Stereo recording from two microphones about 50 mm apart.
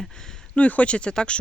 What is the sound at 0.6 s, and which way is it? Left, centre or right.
Speech, left.